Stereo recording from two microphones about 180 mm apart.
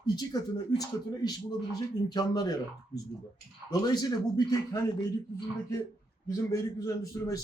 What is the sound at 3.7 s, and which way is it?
A man's voice, 20° left (ahead or behind).